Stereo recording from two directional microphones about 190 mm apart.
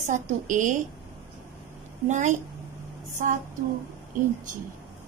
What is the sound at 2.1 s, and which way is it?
Speech, 40° right (ahead or behind).